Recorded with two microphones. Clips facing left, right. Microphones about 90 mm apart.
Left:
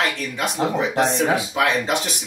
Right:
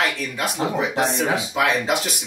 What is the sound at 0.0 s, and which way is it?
Speech, centre (ahead or behind).